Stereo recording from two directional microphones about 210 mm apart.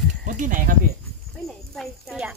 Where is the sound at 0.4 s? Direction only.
40° right (ahead or behind).